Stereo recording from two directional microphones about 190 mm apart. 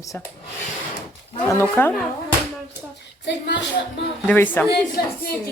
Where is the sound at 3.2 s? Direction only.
65° left (ahead or behind).